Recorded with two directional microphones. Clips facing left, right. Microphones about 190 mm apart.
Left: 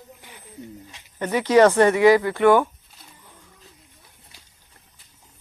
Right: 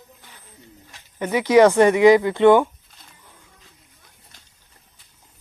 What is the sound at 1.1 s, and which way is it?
Speech, 10° right (ahead or behind).